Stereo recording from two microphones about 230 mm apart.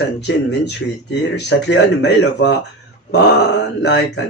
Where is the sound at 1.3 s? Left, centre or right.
Left.